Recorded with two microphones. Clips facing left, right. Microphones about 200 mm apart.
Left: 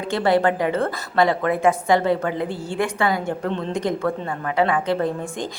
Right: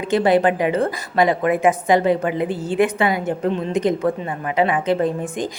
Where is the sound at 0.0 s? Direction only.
20° right (ahead or behind).